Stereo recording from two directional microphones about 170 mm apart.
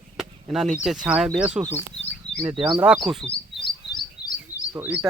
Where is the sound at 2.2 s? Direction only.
40° left (ahead or behind).